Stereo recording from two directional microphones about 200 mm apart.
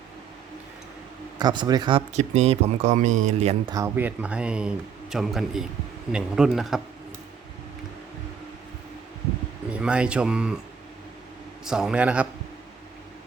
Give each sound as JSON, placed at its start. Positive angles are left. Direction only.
{"t": 1.4, "sound": "speech", "side_deg": -20}
{"t": 3.7, "sound": "a man's voice", "side_deg": -15}
{"t": 9.6, "sound": "speech", "side_deg": -5}
{"t": 11.6, "sound": "a man's voice", "side_deg": -5}